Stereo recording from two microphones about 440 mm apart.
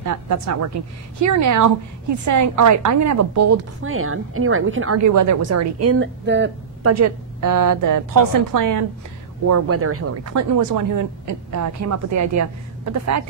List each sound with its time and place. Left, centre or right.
0.0 s speech: right
5.0 s speech: right
6.9 s a woman's voice: right
9.5 s speech: right